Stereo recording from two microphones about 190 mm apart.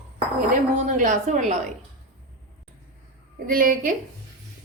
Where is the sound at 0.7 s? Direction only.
40° right (ahead or behind).